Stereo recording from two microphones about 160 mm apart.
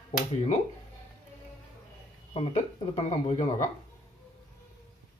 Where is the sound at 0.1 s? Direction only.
45° left (ahead or behind).